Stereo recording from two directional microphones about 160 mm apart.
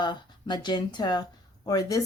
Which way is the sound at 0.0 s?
30° left (ahead or behind).